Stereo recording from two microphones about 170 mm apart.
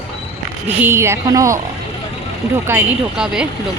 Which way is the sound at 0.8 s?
15° right (ahead or behind).